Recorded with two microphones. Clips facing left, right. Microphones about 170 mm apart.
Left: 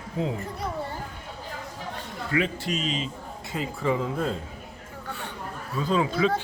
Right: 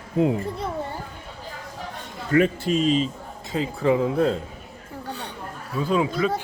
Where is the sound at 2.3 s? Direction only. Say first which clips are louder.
Right 7 dB; 45° right (ahead or behind).